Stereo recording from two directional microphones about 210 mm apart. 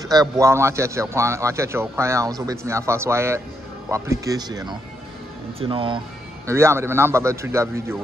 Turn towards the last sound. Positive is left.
turn(degrees=-15)  # may be behind; listen again after turning